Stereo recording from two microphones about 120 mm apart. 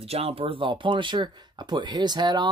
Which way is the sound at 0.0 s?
55° right (ahead or behind).